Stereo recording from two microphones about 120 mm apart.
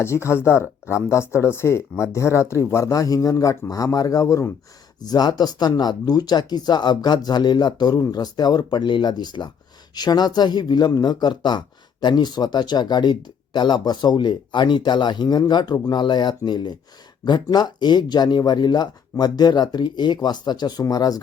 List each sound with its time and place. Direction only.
0.0 s speech: 20° left (ahead or behind)